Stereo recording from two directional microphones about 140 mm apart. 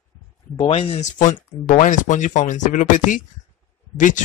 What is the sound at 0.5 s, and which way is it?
Speech, 45° left (ahead or behind).